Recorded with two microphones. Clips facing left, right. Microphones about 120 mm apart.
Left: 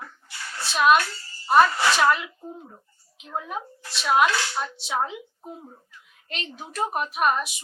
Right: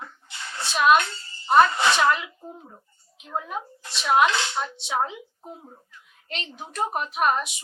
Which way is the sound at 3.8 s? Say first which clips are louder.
Right 1 dB; 20° right (ahead or behind).